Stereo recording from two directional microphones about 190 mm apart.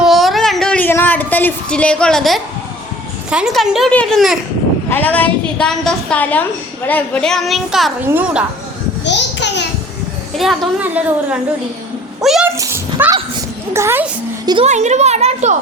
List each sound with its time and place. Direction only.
0.0 s a sound: centre (ahead or behind)
3.2 s a woman's voice: 5° right (ahead or behind)
9.0 s babbling: 65° left (ahead or behind)
10.3 s a woman's voice: 5° right (ahead or behind)
12.5 s a woman's voice: 15° right (ahead or behind)
14.5 s a woman's voice: 35° right (ahead or behind)